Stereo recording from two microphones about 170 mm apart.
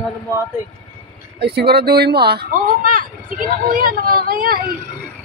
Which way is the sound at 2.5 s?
55° right (ahead or behind).